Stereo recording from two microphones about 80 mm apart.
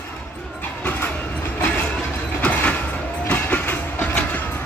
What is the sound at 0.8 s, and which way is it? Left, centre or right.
Train, left.